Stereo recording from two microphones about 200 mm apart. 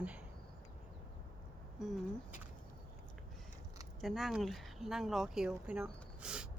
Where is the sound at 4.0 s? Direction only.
Centre (ahead or behind).